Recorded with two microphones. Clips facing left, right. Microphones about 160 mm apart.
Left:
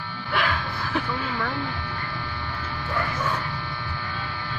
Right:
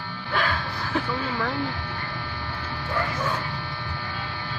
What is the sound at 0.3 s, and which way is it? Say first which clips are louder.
Music: left 1 dB; 40° right (ahead or behind).